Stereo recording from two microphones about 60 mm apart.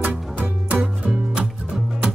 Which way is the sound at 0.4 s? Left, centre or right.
Right.